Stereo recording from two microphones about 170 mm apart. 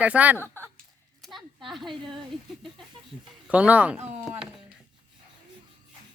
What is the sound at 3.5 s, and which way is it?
Speech, 10° right (ahead or behind).